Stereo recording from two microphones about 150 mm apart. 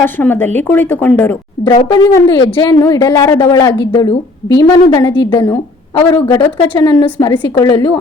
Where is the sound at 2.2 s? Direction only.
35° left (ahead or behind).